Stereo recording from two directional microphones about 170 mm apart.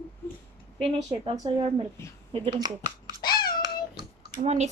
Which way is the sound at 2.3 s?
30° right (ahead or behind).